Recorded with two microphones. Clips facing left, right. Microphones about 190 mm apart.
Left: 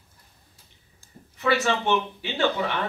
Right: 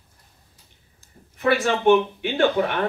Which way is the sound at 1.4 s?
55° right (ahead or behind).